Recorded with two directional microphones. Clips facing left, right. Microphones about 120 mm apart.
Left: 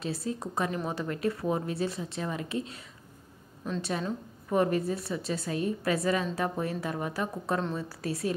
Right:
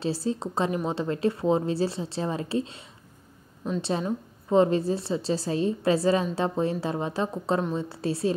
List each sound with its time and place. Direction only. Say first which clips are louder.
0.0 s a woman's voice: right 5 dB; 30° right (ahead or behind)
4.0 s a woman's voice: right 4 dB; 25° right (ahead or behind)